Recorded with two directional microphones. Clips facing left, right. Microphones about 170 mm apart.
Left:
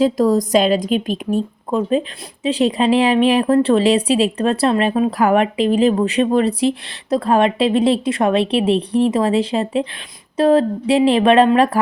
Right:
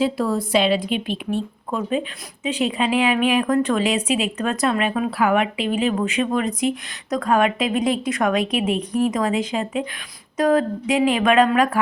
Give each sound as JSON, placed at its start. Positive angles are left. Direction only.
{"t": 0.0, "sound": "a woman's voice", "side_deg": 40}